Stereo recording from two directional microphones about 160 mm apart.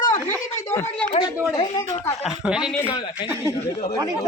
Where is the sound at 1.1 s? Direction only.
30° left (ahead or behind).